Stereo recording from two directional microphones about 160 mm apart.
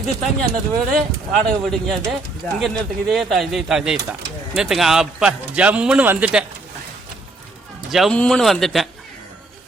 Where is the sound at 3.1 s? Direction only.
Centre (ahead or behind).